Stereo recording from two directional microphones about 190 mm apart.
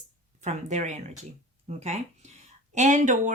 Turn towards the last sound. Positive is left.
turn(degrees=-40)  # may be behind; listen again after turning